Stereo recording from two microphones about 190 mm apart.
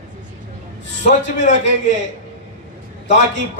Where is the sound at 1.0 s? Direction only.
40° left (ahead or behind).